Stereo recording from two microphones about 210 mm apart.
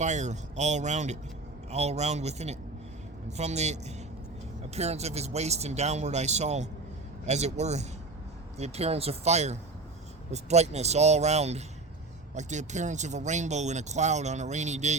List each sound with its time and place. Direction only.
0.0 s speech: 35° right (ahead or behind)